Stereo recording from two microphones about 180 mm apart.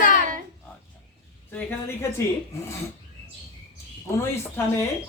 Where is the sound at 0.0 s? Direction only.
50° left (ahead or behind).